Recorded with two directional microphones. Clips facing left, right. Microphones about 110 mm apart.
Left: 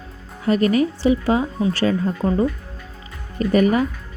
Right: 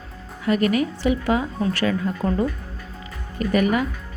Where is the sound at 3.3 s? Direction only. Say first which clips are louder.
Left 3 dB; 35° left (ahead or behind).